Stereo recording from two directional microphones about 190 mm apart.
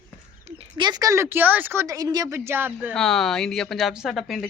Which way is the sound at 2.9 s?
Centre (ahead or behind).